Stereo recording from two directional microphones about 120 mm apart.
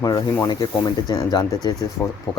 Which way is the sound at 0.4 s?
35° left (ahead or behind).